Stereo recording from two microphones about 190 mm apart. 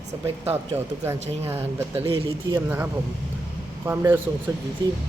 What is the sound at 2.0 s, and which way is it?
Speech, 30° right (ahead or behind).